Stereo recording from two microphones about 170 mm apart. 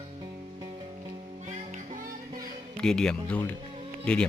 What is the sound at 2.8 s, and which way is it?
Speech, 5° left (ahead or behind).